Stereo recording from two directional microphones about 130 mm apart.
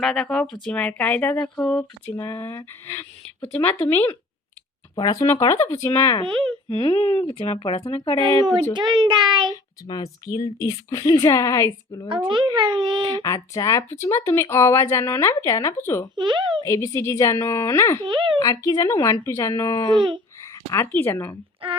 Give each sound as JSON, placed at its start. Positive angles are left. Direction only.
{"t": 0.0, "sound": "speech", "side_deg": 0}
{"t": 2.0, "sound": "speech", "side_deg": 20}
{"t": 6.7, "sound": "speech", "side_deg": 35}
{"t": 8.7, "sound": "a child's voice", "side_deg": -35}
{"t": 9.8, "sound": "speech", "side_deg": 30}
{"t": 12.0, "sound": "a child's voice", "side_deg": -40}
{"t": 13.2, "sound": "speech", "side_deg": 25}
{"t": 16.1, "sound": "a child's voice", "side_deg": -35}
{"t": 16.6, "sound": "speech", "side_deg": 25}
{"t": 18.0, "sound": "a child's voice", "side_deg": -35}
{"t": 18.3, "sound": "speech", "side_deg": 30}
{"t": 19.9, "sound": "a child's voice", "side_deg": -35}
{"t": 20.4, "sound": "speech", "side_deg": 20}
{"t": 21.6, "sound": "a sound", "side_deg": -45}